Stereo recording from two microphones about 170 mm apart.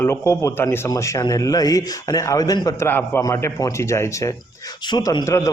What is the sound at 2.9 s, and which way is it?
A man's voice, 10° left (ahead or behind).